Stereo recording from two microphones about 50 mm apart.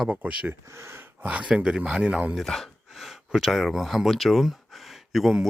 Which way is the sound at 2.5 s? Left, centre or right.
Centre.